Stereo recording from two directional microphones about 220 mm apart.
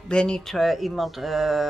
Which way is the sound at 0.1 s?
5° left (ahead or behind).